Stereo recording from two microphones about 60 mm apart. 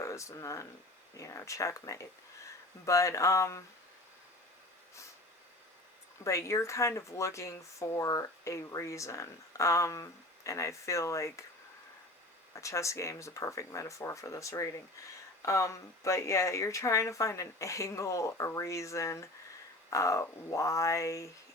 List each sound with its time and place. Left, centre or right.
0.0 s speech: left
6.2 s speech: left
12.5 s speech: left